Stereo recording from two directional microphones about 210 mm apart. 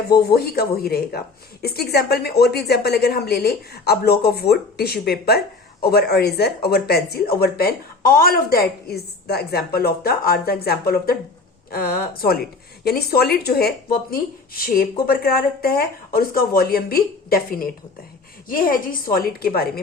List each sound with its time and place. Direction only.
0.1 s speech: 50° left (ahead or behind)
15.0 s speech: 45° left (ahead or behind)